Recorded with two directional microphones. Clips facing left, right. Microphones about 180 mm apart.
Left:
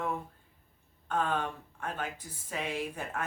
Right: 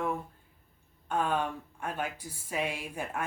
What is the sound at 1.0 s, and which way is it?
Speech, 10° right (ahead or behind).